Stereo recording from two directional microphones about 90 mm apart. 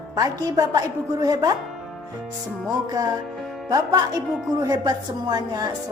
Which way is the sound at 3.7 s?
45° right (ahead or behind).